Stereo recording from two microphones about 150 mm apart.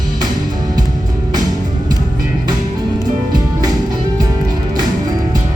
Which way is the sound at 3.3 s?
25° right (ahead or behind).